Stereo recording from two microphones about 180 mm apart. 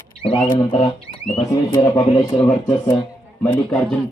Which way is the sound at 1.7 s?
15° left (ahead or behind).